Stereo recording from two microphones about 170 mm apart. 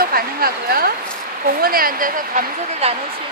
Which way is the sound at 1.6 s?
60° right (ahead or behind).